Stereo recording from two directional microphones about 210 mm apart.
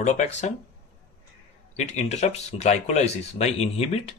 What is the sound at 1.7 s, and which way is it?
Speech, 35° left (ahead or behind).